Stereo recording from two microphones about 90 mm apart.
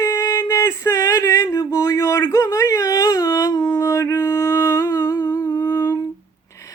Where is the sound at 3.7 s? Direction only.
30° left (ahead or behind).